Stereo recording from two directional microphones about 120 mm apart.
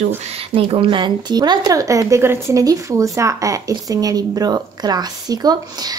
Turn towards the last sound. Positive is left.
turn(degrees=-35)  # may be behind; listen again after turning